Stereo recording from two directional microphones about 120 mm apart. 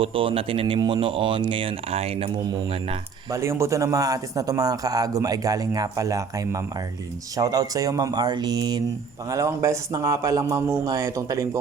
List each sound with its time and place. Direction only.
0.0 s speech: 50° right (ahead or behind)
3.2 s a man's voice: 25° right (ahead or behind)